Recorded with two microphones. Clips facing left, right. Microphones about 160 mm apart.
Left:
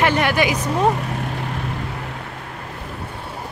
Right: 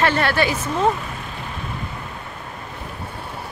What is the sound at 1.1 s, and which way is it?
Vehicle, 65° left (ahead or behind).